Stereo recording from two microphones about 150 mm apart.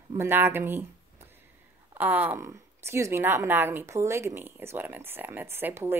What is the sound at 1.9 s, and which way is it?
Speech, 10° right (ahead or behind).